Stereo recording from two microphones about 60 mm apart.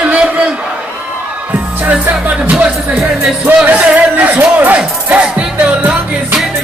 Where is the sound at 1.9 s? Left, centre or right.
Right.